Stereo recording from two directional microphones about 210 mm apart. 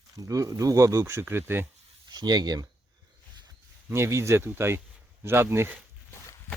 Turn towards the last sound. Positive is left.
turn(degrees=-10)  # may be behind; listen again after turning